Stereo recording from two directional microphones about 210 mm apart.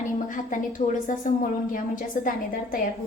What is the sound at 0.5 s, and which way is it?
Speech, 35° left (ahead or behind).